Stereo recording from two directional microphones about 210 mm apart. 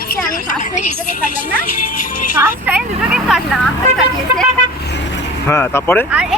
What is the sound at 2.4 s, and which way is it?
Speech, 5° right (ahead or behind).